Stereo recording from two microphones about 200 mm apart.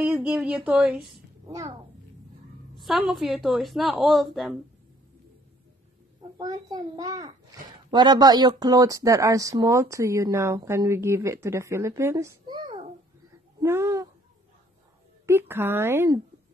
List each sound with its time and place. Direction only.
0.0 s speech: 5° right (ahead or behind)
1.5 s speech: 15° right (ahead or behind)
2.8 s speech: centre (ahead or behind)
6.3 s a child's voice: 20° right (ahead or behind)
13.6 s speech: 15° right (ahead or behind)
15.2 s speech: 10° right (ahead or behind)